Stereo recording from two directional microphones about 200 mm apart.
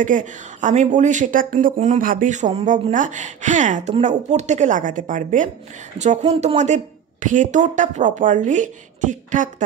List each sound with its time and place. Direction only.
0.0 s speech: 40° right (ahead or behind)